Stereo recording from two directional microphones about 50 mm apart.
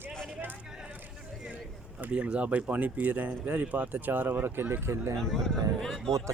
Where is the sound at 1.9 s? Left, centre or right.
Right.